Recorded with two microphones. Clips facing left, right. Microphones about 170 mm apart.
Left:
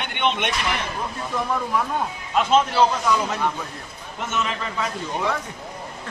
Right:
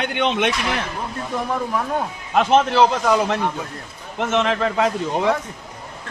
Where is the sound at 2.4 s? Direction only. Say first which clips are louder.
Right 3 dB; 65° right (ahead or behind).